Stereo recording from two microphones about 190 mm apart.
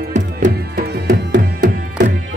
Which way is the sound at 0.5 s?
55° right (ahead or behind).